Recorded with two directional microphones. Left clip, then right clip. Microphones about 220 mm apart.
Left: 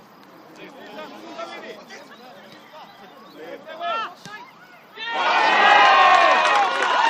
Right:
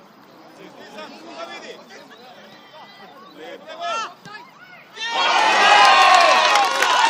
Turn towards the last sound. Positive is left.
turn(degrees=-40)  # may be behind; listen again after turning